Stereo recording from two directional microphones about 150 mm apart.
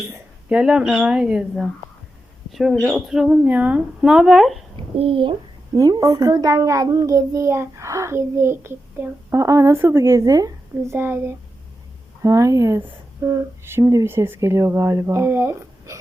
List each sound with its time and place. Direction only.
0.1 s a woman's voice: 10° right (ahead or behind)
4.9 s speech: 35° right (ahead or behind)
5.7 s a child's voice: 25° right (ahead or behind)